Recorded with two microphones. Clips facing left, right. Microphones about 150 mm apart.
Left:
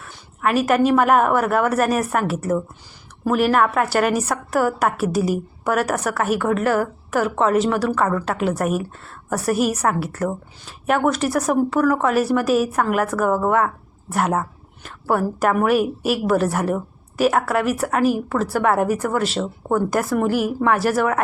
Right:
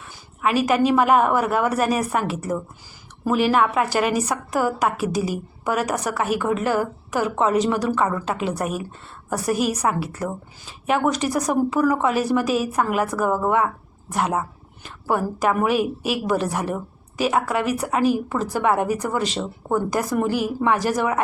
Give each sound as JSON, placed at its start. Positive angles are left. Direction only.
{"t": 0.1, "sound": "a woman's voice", "side_deg": 0}
{"t": 3.2, "sound": "a woman's voice", "side_deg": 0}